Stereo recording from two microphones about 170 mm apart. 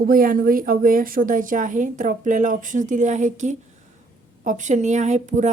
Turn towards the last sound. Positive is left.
turn(degrees=-45)  # may be behind; listen again after turning